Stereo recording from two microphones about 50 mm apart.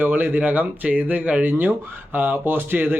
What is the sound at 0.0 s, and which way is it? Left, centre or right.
Speech, right.